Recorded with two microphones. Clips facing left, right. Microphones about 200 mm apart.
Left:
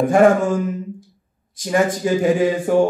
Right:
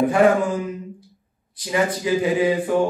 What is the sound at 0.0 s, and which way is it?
Speech, 45° left (ahead or behind).